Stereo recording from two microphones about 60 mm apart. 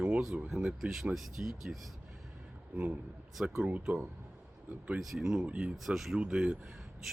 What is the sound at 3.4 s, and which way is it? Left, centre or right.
Speech, centre.